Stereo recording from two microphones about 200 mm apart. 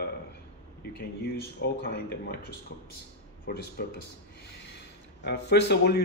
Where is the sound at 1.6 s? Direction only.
55° left (ahead or behind).